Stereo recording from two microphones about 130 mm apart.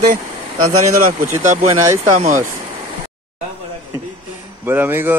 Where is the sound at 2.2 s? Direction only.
85° right.